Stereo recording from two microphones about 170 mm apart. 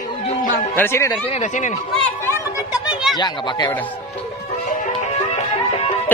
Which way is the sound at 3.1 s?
25° left (ahead or behind).